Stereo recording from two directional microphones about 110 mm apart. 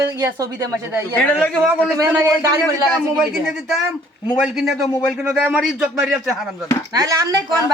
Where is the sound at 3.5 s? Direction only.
Centre (ahead or behind).